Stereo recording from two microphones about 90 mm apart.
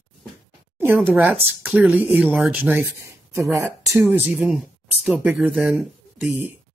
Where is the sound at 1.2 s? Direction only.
15° right (ahead or behind).